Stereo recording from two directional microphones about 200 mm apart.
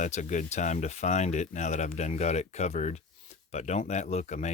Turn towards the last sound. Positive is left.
turn(degrees=35)  # may be behind; listen again after turning